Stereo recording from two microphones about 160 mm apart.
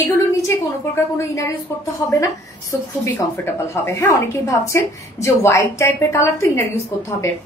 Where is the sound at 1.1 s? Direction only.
20° left (ahead or behind).